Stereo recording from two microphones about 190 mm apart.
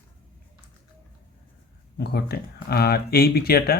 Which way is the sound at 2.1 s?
55° left (ahead or behind).